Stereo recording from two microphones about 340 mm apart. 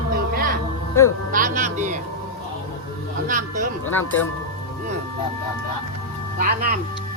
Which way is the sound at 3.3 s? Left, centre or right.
Right.